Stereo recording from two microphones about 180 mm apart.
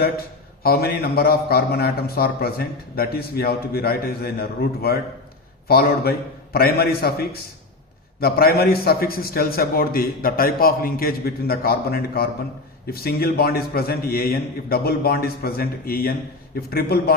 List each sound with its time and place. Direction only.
0.6 s a man's voice: 60° left (ahead or behind)